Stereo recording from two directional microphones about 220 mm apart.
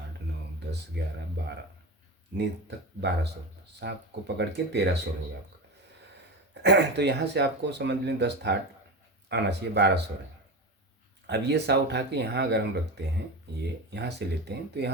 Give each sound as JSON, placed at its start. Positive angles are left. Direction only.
{"t": 2.4, "sound": "speech", "side_deg": -50}
{"t": 6.5, "sound": "speech", "side_deg": -50}
{"t": 11.3, "sound": "speech", "side_deg": -50}